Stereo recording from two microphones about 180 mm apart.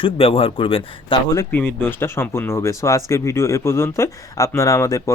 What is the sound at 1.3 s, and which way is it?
Speech, 15° left (ahead or behind).